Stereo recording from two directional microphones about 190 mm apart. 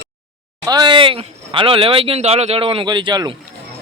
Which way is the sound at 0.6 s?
20° right (ahead or behind).